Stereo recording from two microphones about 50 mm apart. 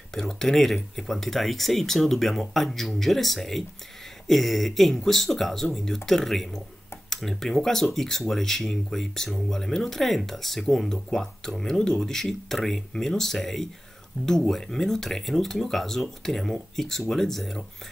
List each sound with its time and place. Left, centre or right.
0.1 s speech: centre